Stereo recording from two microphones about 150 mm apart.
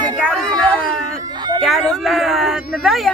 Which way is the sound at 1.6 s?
Centre (ahead or behind).